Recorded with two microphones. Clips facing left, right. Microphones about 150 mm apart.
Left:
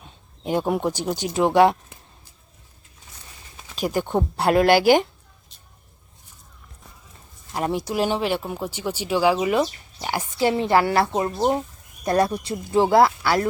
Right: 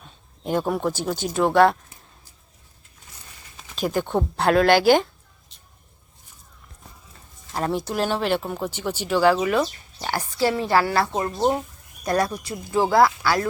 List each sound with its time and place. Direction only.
0.0 s speech: 15° left (ahead or behind)
3.6 s speech: 10° left (ahead or behind)
7.5 s speech: 15° left (ahead or behind)
11.3 s speech: centre (ahead or behind)
12.0 s speech: 25° left (ahead or behind)